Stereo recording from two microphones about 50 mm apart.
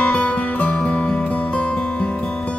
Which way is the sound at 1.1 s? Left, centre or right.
Centre.